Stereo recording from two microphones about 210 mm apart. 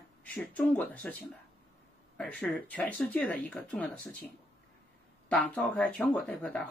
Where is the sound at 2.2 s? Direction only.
5° left (ahead or behind).